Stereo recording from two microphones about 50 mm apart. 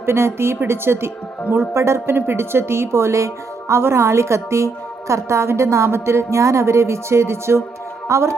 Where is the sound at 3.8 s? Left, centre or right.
Right.